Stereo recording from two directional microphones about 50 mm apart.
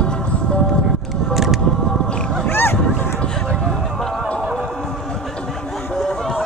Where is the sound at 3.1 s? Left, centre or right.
Centre.